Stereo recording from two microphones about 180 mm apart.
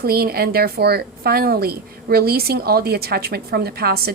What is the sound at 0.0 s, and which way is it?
A woman's voice, 60° right (ahead or behind).